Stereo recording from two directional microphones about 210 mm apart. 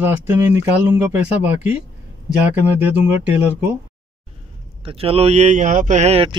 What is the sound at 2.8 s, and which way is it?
Speech, 10° right (ahead or behind).